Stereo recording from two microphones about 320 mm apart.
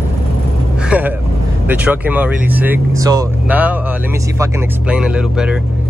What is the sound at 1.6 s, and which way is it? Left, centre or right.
Speech, centre.